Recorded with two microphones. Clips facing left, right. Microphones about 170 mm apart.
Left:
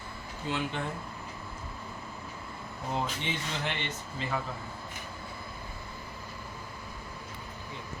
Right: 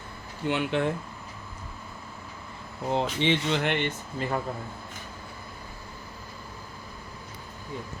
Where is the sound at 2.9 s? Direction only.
90° right; by 4.4 s 50° right (ahead or behind).